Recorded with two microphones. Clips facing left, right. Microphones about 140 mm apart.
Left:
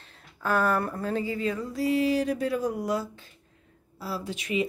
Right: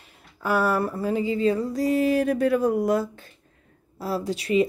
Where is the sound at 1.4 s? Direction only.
35° right (ahead or behind); by 3.3 s 55° right (ahead or behind).